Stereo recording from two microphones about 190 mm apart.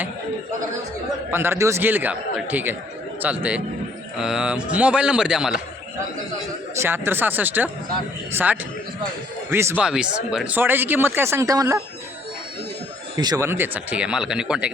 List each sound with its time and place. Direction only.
1.3 s a man's voice: 10° right (ahead or behind)
6.7 s speech: 10° right (ahead or behind)
13.1 s speech: 20° right (ahead or behind)